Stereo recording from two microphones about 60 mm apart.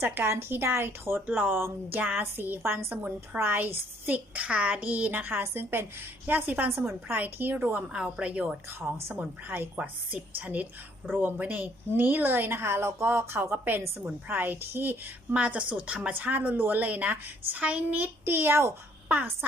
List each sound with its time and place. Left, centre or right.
0.0 s a woman's voice: right
2.0 s a woman's voice: right
2.2 s a woman's voice: right
3.6 s a woman's voice: right
5.4 s a woman's voice: right
7.9 s a woman's voice: centre
8.9 s a woman's voice: right
9.8 s a woman's voice: right
14.0 s a woman's voice: right
19.0 s speech: right